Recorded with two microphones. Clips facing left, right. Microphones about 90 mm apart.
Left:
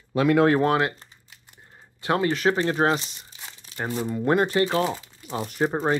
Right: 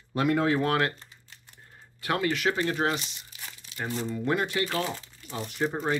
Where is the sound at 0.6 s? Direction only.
20° left (ahead or behind).